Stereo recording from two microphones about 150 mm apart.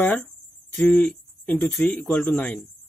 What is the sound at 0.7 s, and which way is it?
Speech, 5° left (ahead or behind).